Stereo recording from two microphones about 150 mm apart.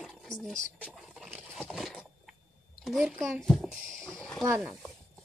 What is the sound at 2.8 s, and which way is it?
Speech, 5° right (ahead or behind).